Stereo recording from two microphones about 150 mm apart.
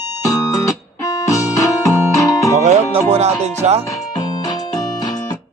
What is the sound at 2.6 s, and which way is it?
Music, 50° right (ahead or behind).